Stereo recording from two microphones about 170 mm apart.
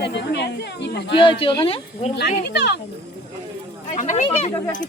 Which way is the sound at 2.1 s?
80° left.